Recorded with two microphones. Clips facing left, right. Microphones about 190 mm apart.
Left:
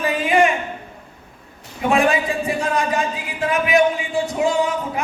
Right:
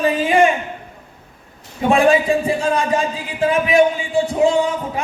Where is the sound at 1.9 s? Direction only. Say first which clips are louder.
Right 4 dB; 30° right (ahead or behind).